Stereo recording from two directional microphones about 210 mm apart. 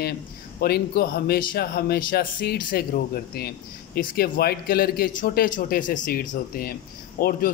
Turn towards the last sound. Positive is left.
turn(degrees=45)  # may be behind; listen again after turning